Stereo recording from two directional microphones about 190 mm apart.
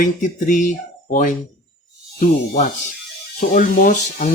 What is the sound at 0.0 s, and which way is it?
Speech, 45° left (ahead or behind).